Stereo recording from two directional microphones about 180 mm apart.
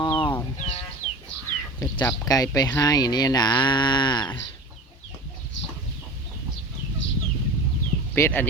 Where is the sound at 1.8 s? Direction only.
20° left (ahead or behind).